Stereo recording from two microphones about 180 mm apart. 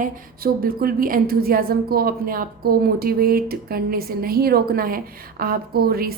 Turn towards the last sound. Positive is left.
turn(degrees=-55)  # may be behind; listen again after turning